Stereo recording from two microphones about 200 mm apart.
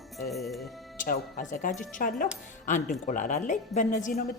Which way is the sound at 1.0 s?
40° left (ahead or behind).